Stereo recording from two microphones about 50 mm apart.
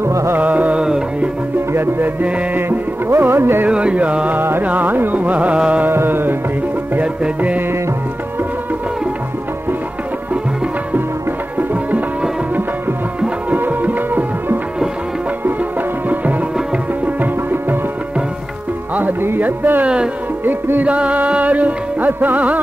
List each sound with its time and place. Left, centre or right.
0.0 s music: right
0.4 s music: right
0.7 s music: centre
1.7 s music: right
3.1 s music: right
3.6 s carnatic music: right
4.4 s music: right
5.6 s carnatic music: right
5.9 s music: right
7.0 s music: right
13.5 s music: right
17.0 s tabla: right
19.2 s music: right
20.8 s music: right